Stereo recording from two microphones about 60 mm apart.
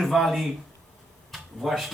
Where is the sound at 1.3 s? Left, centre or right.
Centre.